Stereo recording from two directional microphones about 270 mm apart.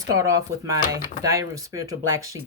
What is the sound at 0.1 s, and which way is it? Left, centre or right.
Speech, centre.